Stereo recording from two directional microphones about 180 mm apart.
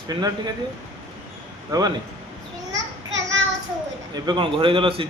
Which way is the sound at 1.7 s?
20° right (ahead or behind).